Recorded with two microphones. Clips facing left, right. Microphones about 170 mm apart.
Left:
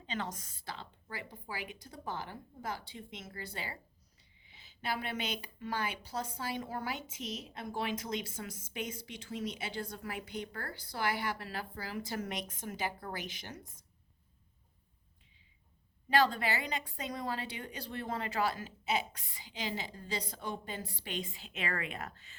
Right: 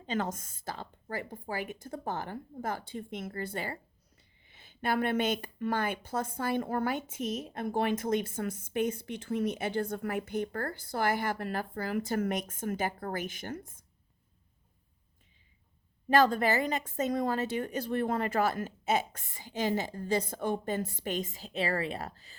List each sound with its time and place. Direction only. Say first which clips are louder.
0.0 s speech: right 7 dB; 45° right (ahead or behind)
16.0 s speech: right 5 dB; 45° right (ahead or behind)